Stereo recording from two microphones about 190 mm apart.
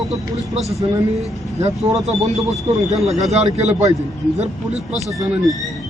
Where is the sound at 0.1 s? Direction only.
Centre (ahead or behind).